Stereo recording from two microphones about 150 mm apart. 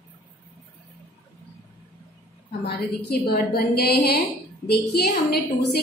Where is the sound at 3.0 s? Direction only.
90° left.